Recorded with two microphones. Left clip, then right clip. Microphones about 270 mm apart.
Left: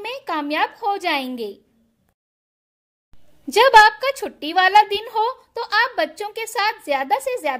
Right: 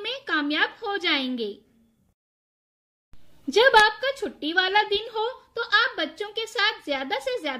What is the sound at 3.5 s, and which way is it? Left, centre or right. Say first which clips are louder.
A woman's voice: left 6 dB; left.